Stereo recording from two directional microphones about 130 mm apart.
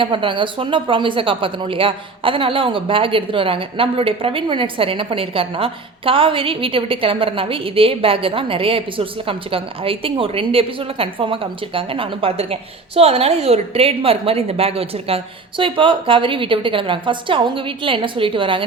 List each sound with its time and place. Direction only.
0.0 s speech: 40° right (ahead or behind)